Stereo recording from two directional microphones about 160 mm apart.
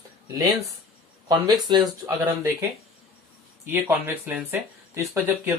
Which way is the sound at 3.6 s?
10° right (ahead or behind).